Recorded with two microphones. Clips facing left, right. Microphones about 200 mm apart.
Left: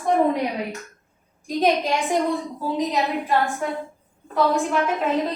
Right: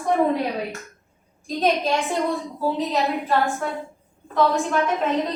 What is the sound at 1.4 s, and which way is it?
A woman's voice, 15° left (ahead or behind).